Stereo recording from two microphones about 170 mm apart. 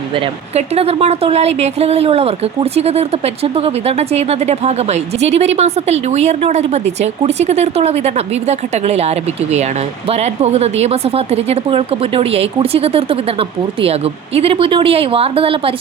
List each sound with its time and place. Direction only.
0.1 s speech: 35° right (ahead or behind)